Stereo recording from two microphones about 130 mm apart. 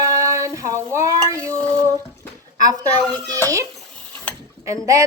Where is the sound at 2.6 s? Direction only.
30° right (ahead or behind).